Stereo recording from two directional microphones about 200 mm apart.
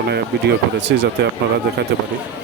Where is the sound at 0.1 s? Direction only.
60° right (ahead or behind).